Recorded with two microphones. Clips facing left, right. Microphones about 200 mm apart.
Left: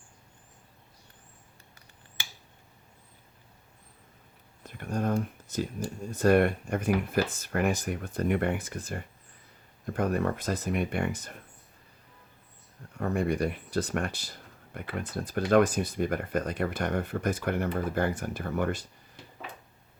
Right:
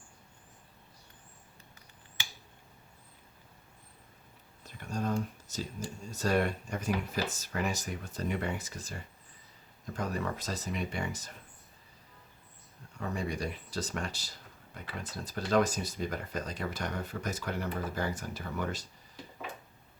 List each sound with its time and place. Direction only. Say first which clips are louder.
4.6 s speech: left 4 dB; 55° left (ahead or behind)
13.0 s speech: left 7 dB; 55° left (ahead or behind)